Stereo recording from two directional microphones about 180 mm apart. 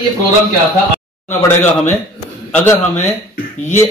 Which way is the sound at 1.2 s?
10° left (ahead or behind).